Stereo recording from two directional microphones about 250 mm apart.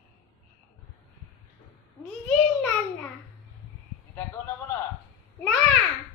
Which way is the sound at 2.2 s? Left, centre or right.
Centre.